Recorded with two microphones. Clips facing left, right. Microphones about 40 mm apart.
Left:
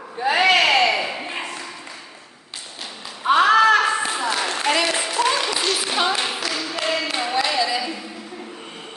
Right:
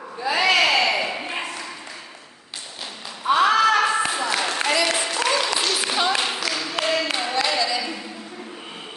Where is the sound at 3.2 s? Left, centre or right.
Left.